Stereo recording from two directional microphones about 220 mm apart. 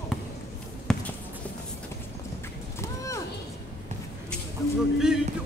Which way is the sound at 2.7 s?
15° left (ahead or behind).